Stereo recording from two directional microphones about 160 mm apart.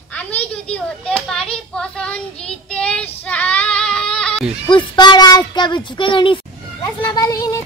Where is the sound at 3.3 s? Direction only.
10° left (ahead or behind).